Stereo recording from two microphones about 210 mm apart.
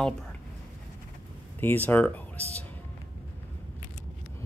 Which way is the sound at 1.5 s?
10° left (ahead or behind).